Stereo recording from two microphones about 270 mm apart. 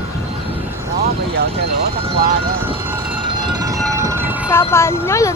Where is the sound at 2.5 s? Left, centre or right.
Centre.